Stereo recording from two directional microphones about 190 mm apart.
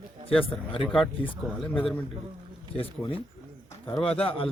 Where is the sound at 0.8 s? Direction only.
Centre (ahead or behind).